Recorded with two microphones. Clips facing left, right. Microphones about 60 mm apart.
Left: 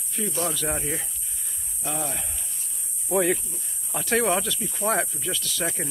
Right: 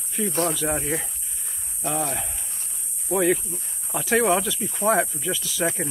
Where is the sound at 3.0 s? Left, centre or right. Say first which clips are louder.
Right 2 dB; centre.